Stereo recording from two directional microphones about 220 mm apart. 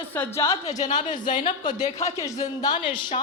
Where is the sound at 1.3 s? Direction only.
20° left (ahead or behind).